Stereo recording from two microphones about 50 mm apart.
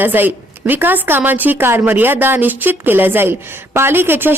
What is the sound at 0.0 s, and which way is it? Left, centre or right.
A woman's voice, right.